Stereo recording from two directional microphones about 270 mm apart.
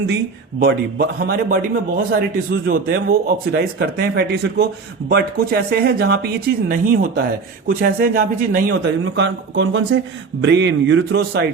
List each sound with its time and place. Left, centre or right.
0.6 s a man's voice: right